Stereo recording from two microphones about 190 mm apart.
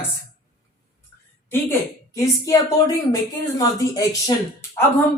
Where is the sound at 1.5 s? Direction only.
15° left (ahead or behind).